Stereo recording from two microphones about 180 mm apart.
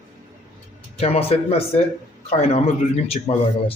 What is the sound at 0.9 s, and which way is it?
Speech, 35° left (ahead or behind).